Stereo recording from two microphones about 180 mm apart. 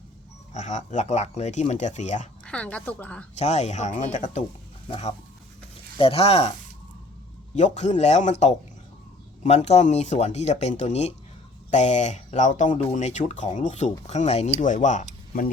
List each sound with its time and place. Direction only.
0.5 s speech: 40° left (ahead or behind)
2.4 s a woman's voice: 5° left (ahead or behind)
3.3 s speech: 35° left (ahead or behind)
7.5 s speech: 40° left (ahead or behind)